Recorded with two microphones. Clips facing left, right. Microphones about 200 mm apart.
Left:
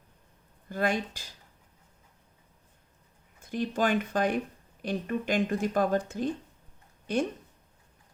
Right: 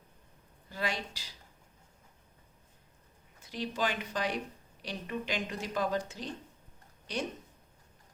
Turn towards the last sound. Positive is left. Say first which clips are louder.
# left 8 dB
turn(degrees=50)  # may be behind; listen again after turning